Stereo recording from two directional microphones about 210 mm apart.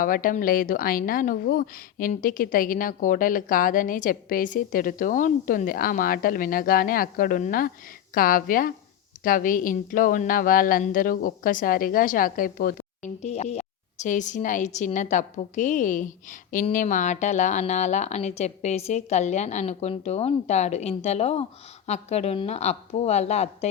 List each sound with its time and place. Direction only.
0.0 s a woman's voice: 40° left (ahead or behind)